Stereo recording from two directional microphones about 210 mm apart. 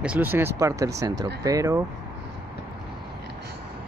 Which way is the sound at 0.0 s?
5° right (ahead or behind).